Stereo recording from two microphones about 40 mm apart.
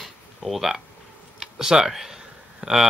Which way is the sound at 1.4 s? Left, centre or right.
Centre.